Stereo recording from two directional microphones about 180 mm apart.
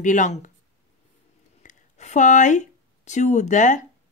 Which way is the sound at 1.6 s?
40° left (ahead or behind).